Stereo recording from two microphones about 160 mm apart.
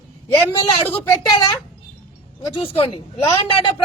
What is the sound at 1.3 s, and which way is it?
Speech, 25° left (ahead or behind).